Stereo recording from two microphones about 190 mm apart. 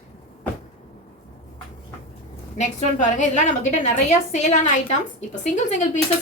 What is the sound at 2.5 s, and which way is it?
A woman's voice, 40° left (ahead or behind).